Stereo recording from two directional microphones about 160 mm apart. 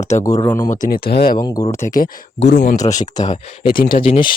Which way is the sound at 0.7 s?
60° left (ahead or behind).